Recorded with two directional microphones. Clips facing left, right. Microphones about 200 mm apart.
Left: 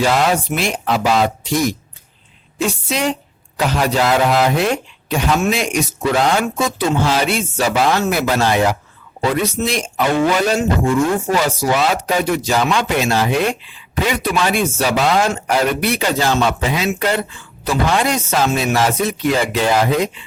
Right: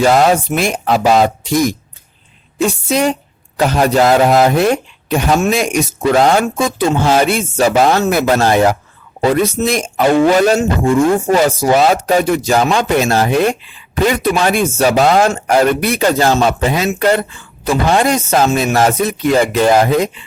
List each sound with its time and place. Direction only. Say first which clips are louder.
0.0 s speech: right 5 dB; 45° right (ahead or behind)
2.6 s speech: right 5 dB; 45° right (ahead or behind)